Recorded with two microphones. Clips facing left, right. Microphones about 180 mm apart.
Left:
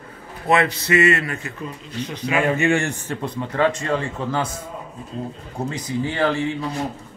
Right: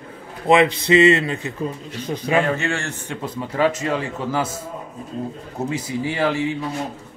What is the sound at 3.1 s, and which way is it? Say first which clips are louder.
A man's voice: left 1 dB; 5° right (ahead or behind).